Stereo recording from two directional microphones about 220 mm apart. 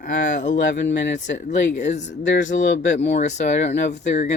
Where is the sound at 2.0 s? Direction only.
55° left (ahead or behind).